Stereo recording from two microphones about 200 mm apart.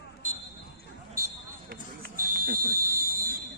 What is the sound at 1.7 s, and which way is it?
Fire alarm, 45° right (ahead or behind).